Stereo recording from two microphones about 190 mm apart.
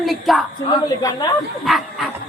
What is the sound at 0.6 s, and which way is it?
Speech, 20° left (ahead or behind).